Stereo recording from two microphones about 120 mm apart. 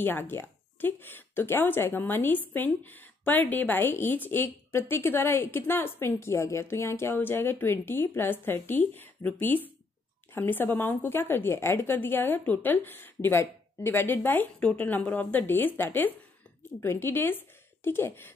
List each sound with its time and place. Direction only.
0.0 s a woman's voice: 15° left (ahead or behind)